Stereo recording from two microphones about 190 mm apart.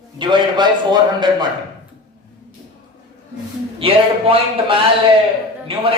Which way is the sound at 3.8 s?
30° right (ahead or behind).